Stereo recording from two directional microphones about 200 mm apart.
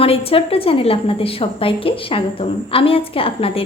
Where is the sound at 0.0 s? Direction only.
30° left (ahead or behind).